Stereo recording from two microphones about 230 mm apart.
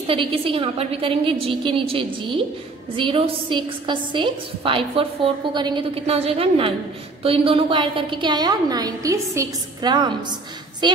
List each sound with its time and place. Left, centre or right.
0.0 s a woman's voice: right